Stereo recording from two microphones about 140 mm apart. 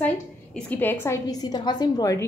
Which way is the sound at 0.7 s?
15° left (ahead or behind).